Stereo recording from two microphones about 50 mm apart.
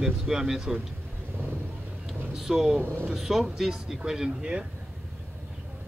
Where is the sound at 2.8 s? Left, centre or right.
Right.